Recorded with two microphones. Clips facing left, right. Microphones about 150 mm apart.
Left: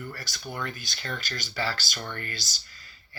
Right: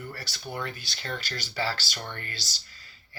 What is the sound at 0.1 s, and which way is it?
Speech, 35° right (ahead or behind).